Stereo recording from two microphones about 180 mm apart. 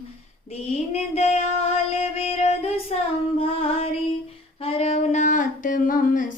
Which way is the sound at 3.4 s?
35° left (ahead or behind).